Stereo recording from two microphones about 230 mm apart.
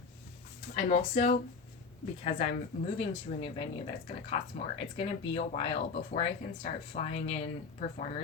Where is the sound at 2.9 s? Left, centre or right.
Left.